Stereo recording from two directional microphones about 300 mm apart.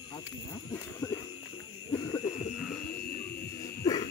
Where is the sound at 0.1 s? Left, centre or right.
Centre.